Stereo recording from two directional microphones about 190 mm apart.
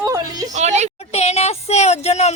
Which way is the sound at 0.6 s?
35° right (ahead or behind).